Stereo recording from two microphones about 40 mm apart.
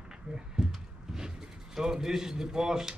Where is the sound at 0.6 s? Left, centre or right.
Centre.